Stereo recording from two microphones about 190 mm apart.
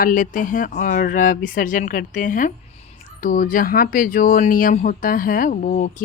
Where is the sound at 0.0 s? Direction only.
45° left (ahead or behind).